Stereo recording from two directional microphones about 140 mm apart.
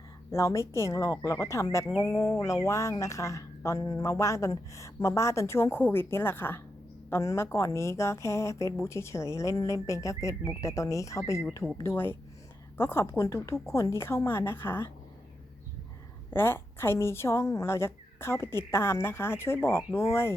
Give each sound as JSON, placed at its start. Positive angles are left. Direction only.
{"t": 0.3, "sound": "a woman's voice", "side_deg": 20}
{"t": 16.3, "sound": "a woman's voice", "side_deg": 15}